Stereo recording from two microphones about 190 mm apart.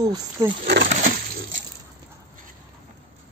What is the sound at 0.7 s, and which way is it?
Speech, 60° right (ahead or behind).